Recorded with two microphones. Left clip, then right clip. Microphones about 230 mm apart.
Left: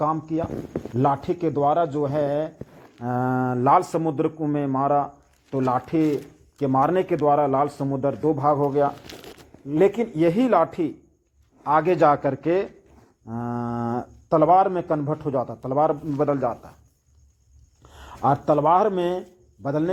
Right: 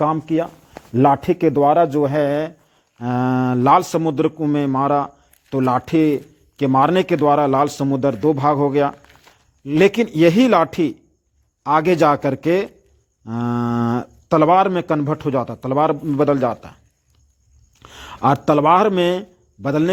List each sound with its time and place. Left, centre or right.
0.0 s speech: right
3.0 s a man's voice: right
9.1 s crumpling: left
9.6 s speech: right
17.8 s speech: right